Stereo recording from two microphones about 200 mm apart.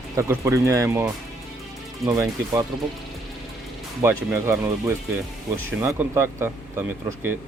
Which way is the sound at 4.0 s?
15° right (ahead or behind).